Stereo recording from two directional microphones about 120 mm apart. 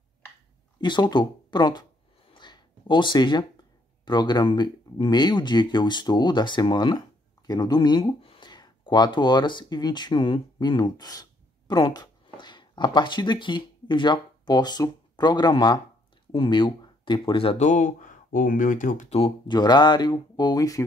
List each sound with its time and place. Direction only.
0.7 s speech: 40° left (ahead or behind)
2.3 s a sound: 40° left (ahead or behind)
4.0 s speech: 35° left (ahead or behind)
17.6 s speech: 90° left; by 19.3 s 60° left (ahead or behind)
19.4 s speech: 40° left (ahead or behind)